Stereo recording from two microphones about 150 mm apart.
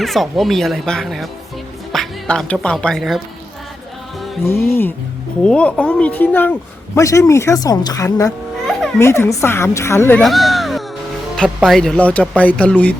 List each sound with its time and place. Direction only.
0.0 s speech: centre (ahead or behind)
4.4 s speech: 15° left (ahead or behind)
10.2 s music: centre (ahead or behind)
11.4 s speech: centre (ahead or behind)